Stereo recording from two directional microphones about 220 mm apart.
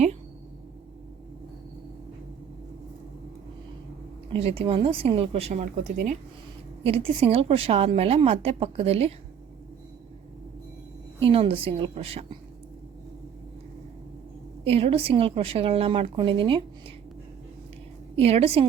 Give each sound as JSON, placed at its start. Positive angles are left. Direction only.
{"t": 4.3, "sound": "a woman's voice", "side_deg": -25}
{"t": 11.2, "sound": "a woman's voice", "side_deg": -25}
{"t": 14.6, "sound": "a woman's voice", "side_deg": -25}
{"t": 18.2, "sound": "a woman's voice", "side_deg": -25}